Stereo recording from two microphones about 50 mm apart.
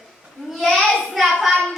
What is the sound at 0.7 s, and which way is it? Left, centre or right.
Child singing, centre.